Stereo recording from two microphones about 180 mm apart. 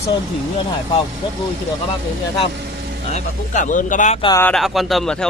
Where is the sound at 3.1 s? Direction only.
45° left (ahead or behind).